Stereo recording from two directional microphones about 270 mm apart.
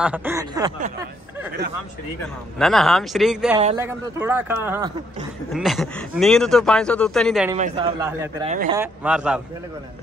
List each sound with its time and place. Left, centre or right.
0.0 s speech: centre
2.6 s speech: centre
3.5 s speech: centre
7.5 s a man's voice: right
8.0 s speech: centre